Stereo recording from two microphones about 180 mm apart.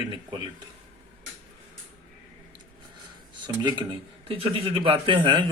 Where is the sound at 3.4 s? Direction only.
25° right (ahead or behind).